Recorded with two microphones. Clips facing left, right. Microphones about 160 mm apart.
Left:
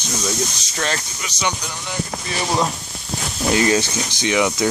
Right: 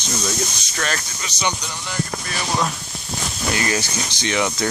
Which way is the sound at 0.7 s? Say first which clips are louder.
Left 2 dB; 25° left (ahead or behind).